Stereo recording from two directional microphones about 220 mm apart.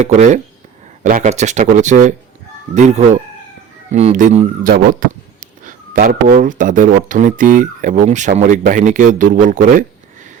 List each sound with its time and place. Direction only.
0.0 s a man's voice: 30° right (ahead or behind)